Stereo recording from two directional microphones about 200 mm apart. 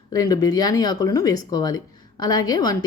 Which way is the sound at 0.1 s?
20° left (ahead or behind).